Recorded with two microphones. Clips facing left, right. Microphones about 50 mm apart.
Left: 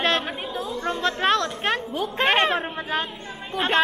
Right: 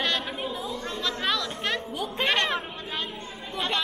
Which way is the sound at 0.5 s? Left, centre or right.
Left.